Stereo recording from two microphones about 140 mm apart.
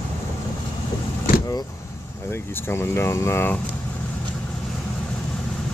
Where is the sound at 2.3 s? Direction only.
15° left (ahead or behind).